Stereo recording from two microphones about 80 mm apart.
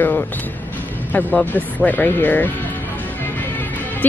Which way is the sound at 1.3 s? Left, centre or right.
Left.